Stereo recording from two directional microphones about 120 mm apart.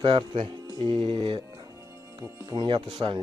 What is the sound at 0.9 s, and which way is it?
Speech, 45° right (ahead or behind).